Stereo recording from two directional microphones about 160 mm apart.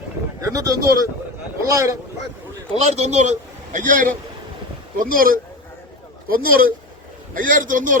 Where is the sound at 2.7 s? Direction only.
45° right (ahead or behind).